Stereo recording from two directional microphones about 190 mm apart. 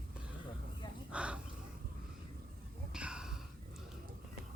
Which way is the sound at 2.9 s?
5° right (ahead or behind).